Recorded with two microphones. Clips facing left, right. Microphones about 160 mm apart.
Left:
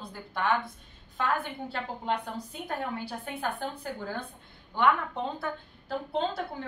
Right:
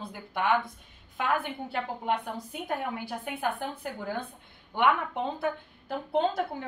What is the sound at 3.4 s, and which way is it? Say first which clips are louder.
Speech: right 1 dB; 15° right (ahead or behind).